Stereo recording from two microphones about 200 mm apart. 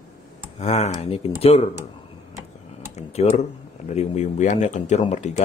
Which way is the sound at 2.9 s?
30° left (ahead or behind).